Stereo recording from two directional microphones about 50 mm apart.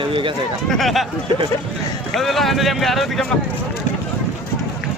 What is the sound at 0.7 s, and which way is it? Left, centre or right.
Speech, centre.